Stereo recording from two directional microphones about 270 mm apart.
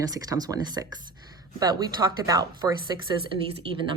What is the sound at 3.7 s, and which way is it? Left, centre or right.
Speech, centre.